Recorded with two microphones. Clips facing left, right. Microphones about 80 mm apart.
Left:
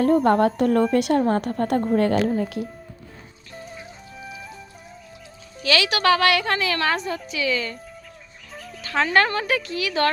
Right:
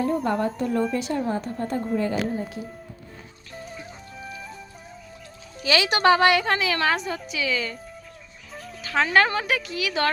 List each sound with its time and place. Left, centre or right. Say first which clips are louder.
0.0 s a woman's voice: left 6 dB; left
3.5 s music: even; centre
5.6 s speech: even; right
6.4 s a woman's voice: even; centre